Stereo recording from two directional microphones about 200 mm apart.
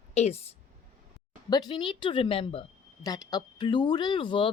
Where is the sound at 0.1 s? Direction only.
30° left (ahead or behind).